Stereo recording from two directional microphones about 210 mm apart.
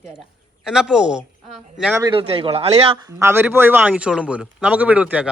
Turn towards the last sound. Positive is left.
turn(degrees=-5)  # may be behind; listen again after turning